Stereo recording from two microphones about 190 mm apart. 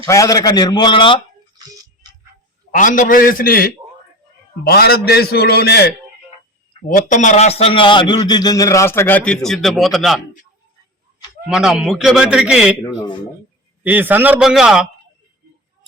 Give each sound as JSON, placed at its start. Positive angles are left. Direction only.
{"t": 0.0, "sound": "a man's voice", "side_deg": 20}
{"t": 2.7, "sound": "a man's voice", "side_deg": 45}
{"t": 6.8, "sound": "a man's voice", "side_deg": 45}
{"t": 11.4, "sound": "a man's voice", "side_deg": -5}
{"t": 12.8, "sound": "speech", "side_deg": 20}
{"t": 13.8, "sound": "a man's voice", "side_deg": -10}